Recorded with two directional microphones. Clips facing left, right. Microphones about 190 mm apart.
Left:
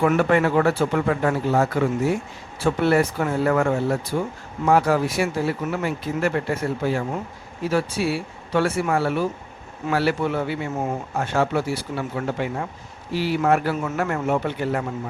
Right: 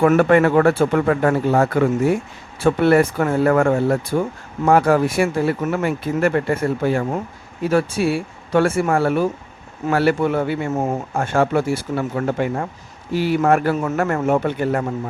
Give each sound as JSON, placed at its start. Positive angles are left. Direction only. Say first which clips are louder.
{"t": 0.0, "sound": "a man's voice", "louder": "right 5 dB", "side_deg": -55}